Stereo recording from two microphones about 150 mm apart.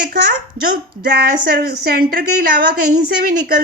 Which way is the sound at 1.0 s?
90° right.